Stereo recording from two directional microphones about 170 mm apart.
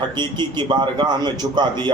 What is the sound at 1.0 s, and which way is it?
Speech, 25° right (ahead or behind).